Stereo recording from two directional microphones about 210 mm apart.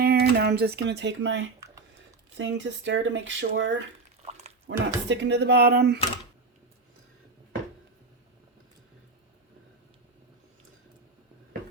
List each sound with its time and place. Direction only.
0.0 s speech: 50° right (ahead or behind)
4.3 s drip: 30° right (ahead or behind)
4.6 s speech: 55° right (ahead or behind)